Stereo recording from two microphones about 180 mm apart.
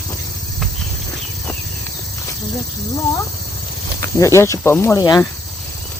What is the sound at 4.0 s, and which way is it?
Speech, 15° left (ahead or behind).